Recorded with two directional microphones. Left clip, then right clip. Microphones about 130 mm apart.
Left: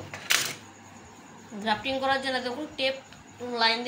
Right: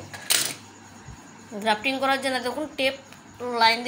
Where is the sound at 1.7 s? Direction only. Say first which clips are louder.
Right 4 dB; 55° right (ahead or behind).